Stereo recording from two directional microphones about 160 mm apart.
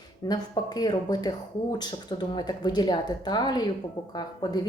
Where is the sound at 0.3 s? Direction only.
25° left (ahead or behind).